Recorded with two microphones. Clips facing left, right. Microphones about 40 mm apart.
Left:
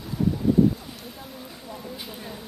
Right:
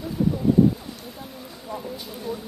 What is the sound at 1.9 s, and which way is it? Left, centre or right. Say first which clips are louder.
Speech: right 4 dB; centre.